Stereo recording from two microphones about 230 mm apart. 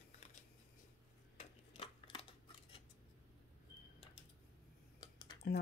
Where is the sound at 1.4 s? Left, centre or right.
Left.